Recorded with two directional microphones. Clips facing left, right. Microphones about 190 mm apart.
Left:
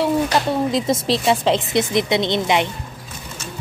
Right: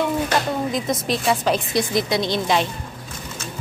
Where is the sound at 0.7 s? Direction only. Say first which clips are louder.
Left 4 dB; 30° left (ahead or behind).